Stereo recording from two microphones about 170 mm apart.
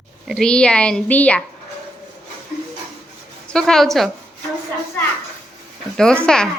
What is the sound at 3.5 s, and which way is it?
Speech, centre (ahead or behind).